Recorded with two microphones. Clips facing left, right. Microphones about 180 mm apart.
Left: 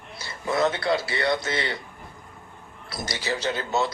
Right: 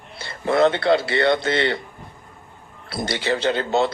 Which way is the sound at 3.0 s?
60° right (ahead or behind).